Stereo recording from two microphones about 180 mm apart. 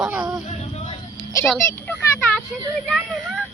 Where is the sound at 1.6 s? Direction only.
15° left (ahead or behind).